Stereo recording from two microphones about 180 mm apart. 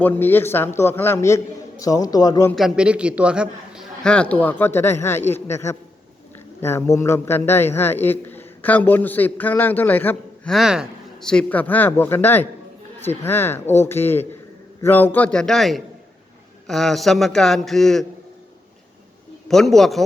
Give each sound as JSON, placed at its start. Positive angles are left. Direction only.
{"t": 0.0, "sound": "a man's voice", "side_deg": 10}
{"t": 2.5, "sound": "a man's voice", "side_deg": 0}
{"t": 19.5, "sound": "a man's voice", "side_deg": 0}